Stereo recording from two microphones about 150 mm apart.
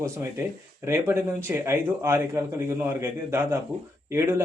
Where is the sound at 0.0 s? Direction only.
15° right (ahead or behind).